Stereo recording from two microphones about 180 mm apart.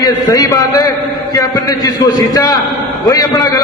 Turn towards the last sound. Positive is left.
turn(degrees=20)  # may be behind; listen again after turning